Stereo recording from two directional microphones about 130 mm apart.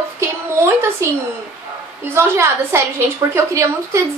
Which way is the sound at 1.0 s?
20° right (ahead or behind).